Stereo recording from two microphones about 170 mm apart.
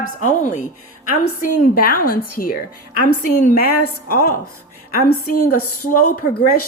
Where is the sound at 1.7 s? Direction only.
60° left (ahead or behind).